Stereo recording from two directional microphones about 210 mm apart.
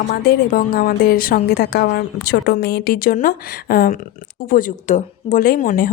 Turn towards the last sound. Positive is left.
turn(degrees=40)  # may be behind; listen again after turning